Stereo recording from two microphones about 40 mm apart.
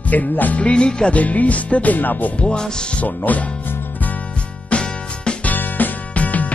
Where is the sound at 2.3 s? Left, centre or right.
Left.